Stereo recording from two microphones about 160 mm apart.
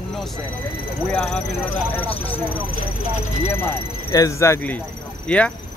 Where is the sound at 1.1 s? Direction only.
5° left (ahead or behind).